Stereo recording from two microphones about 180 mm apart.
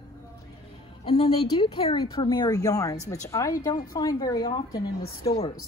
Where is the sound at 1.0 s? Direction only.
35° left (ahead or behind).